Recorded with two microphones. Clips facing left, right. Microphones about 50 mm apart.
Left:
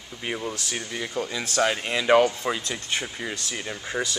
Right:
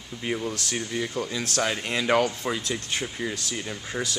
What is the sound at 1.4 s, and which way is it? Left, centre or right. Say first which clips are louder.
Speech: left 5 dB; left.